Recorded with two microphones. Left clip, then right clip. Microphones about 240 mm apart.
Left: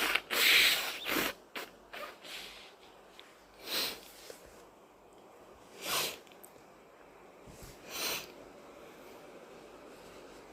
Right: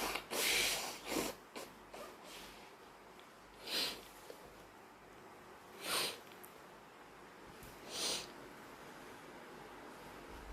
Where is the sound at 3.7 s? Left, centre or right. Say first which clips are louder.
Left 3 dB; left.